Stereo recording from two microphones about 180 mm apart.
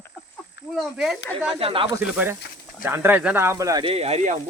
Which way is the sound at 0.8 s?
Centre (ahead or behind).